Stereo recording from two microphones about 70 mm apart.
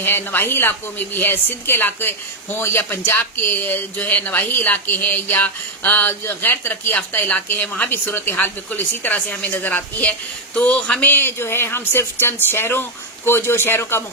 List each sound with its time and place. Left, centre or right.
0.0 s a woman's voice: left; by 11.1 s centre
11.1 s speech: left